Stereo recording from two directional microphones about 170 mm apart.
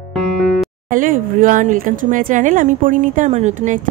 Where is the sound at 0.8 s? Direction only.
50° right (ahead or behind).